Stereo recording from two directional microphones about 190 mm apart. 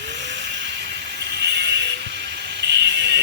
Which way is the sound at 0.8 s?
60° right (ahead or behind).